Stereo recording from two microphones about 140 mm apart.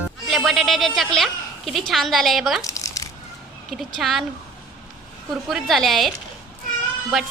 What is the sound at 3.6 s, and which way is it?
Speech, centre (ahead or behind).